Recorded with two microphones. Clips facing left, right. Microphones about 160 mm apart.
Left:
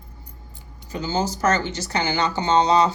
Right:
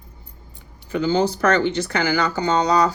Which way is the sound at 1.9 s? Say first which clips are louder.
Left 1 dB; 25° left (ahead or behind).